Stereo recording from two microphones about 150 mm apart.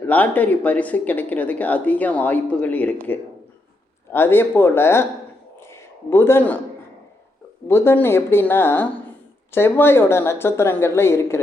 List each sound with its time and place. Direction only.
0.0 s a woman's voice: 10° left (ahead or behind)
5.5 s a sound: 15° left (ahead or behind)
7.7 s a woman's voice: 15° left (ahead or behind)